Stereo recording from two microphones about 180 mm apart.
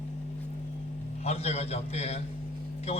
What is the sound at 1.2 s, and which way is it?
Speech, 35° left (ahead or behind).